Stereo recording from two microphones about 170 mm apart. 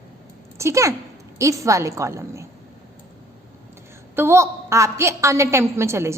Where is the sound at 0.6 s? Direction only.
20° right (ahead or behind).